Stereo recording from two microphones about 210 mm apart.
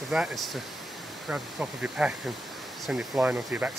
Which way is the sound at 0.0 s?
Centre (ahead or behind).